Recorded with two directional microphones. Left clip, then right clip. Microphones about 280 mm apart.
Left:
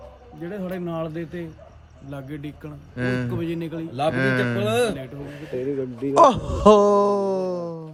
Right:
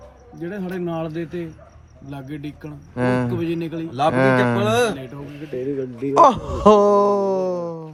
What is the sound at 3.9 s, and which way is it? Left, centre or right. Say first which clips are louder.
Speech: right 4 dB; centre.